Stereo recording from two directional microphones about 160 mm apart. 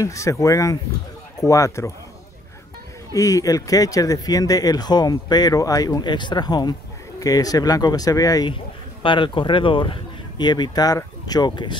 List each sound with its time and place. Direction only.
0.0 s speech: 20° left (ahead or behind)
3.1 s speech: 20° left (ahead or behind)